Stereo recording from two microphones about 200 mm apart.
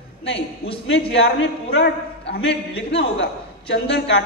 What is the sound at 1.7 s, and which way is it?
A woman's voice, 55° left (ahead or behind).